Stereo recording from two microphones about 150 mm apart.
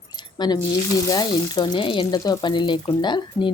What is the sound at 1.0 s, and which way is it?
Frying, 30° left (ahead or behind).